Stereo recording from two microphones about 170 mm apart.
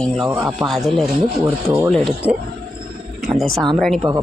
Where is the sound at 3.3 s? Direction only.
Centre (ahead or behind).